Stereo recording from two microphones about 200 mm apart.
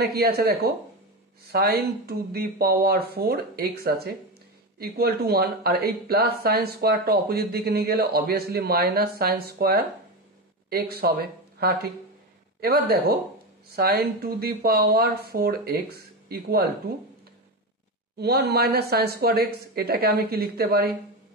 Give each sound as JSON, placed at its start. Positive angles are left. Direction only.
{"t": 0.0, "sound": "speech", "side_deg": -50}
{"t": 18.1, "sound": "speech", "side_deg": -55}